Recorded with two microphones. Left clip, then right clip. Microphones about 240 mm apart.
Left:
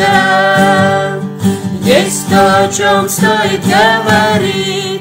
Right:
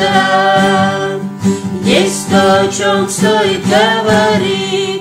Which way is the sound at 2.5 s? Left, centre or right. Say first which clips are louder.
Left 1 dB; left.